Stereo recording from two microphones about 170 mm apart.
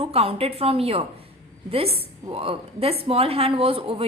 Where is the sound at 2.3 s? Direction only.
35° right (ahead or behind).